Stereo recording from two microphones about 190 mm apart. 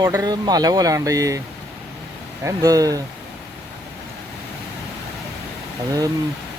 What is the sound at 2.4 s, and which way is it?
Speech, 20° right (ahead or behind).